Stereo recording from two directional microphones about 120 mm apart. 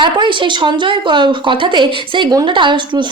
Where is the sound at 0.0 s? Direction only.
40° right (ahead or behind).